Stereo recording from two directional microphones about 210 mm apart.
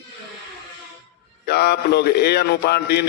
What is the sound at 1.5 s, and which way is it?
A man's voice, 50° left (ahead or behind).